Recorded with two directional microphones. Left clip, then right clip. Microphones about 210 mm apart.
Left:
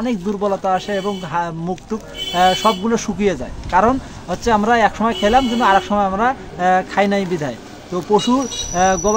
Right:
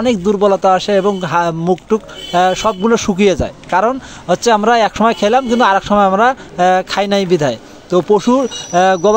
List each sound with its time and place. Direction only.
0.0 s speech: 35° right (ahead or behind)